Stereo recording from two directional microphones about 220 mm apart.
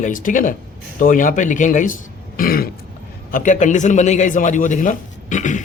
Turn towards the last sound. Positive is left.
turn(degrees=35)  # may be behind; listen again after turning